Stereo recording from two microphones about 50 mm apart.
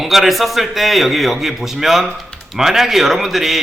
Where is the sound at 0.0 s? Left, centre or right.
Centre.